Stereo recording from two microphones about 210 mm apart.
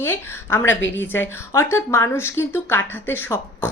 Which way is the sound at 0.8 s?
60° left (ahead or behind).